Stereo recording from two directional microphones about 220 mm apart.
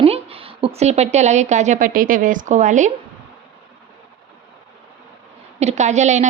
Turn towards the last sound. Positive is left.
turn(degrees=-30)  # may be behind; listen again after turning